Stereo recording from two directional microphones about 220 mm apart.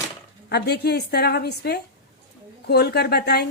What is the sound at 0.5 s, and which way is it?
A woman's voice, 50° left (ahead or behind).